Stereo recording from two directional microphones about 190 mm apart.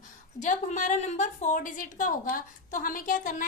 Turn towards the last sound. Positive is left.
turn(degrees=45)  # may be behind; listen again after turning